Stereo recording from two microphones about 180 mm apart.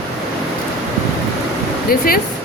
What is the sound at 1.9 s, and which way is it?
Speech, 55° left (ahead or behind).